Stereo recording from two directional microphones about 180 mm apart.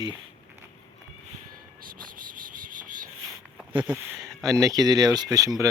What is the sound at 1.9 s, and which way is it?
Cricket, 50° right (ahead or behind).